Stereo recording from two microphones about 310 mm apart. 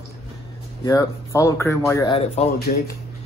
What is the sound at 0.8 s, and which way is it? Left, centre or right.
Speech, centre.